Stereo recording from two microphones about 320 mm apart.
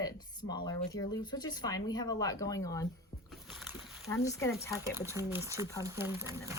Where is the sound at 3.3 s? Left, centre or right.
Centre.